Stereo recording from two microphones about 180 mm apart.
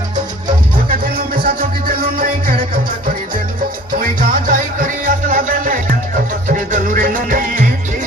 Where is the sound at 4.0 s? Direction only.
50° right (ahead or behind).